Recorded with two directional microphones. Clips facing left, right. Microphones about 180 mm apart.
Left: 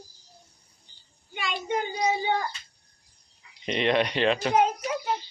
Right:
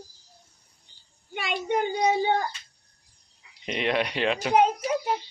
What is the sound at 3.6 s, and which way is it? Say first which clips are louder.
Speech: left 2 dB; 5° right (ahead or behind).